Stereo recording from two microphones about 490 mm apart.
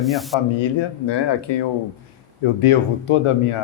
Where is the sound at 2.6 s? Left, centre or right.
Left.